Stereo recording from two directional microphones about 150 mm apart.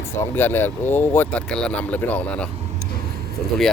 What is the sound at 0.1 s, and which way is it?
Speech, 15° left (ahead or behind).